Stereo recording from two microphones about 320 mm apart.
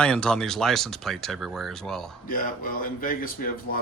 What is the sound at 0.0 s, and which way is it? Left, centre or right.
Speech, centre.